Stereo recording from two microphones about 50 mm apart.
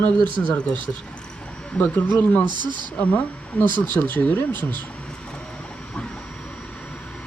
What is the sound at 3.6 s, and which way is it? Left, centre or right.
Speech, left.